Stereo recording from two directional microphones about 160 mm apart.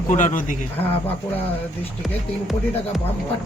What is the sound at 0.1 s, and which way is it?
Speech, 50° left (ahead or behind).